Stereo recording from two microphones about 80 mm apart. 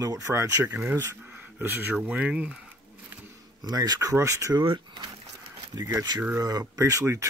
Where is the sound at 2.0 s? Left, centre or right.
Centre.